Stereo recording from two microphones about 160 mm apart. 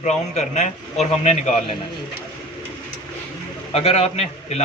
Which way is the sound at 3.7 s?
40° left (ahead or behind).